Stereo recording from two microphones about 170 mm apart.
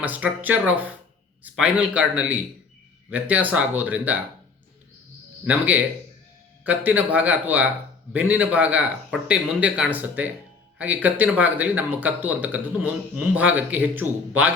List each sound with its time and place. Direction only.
0.0 s speech: 10° right (ahead or behind)
5.5 s speech: 10° right (ahead or behind)